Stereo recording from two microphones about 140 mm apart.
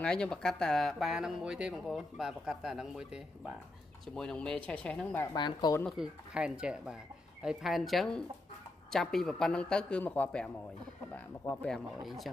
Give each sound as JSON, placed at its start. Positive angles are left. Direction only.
{"t": 0.0, "sound": "speech", "side_deg": 5}
{"t": 5.3, "sound": "speech", "side_deg": 30}
{"t": 5.9, "sound": "speech", "side_deg": -5}